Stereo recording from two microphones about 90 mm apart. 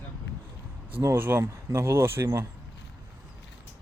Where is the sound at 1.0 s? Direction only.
30° right (ahead or behind).